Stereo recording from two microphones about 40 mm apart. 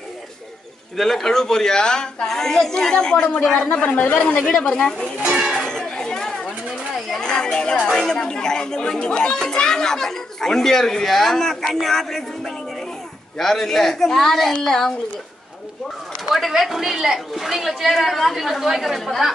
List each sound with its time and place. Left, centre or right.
0.9 s a child's voice: centre
2.2 s a child's voice: centre
3.8 s speech: left
4.1 s speech: left
4.5 s a child's voice: centre
5.3 s music: centre
5.7 s chatter: centre
7.2 s a sound: centre
7.9 s a child's voice: centre
16.3 s a woman's voice: centre